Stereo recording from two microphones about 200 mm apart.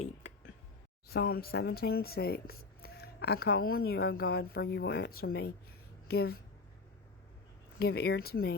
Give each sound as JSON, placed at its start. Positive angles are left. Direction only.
{"t": 1.0, "sound": "speech", "side_deg": 50}
{"t": 7.8, "sound": "speech", "side_deg": 55}